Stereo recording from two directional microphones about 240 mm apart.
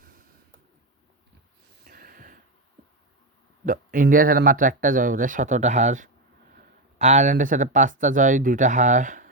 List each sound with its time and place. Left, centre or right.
1.8 s snort: right
3.7 s speech: right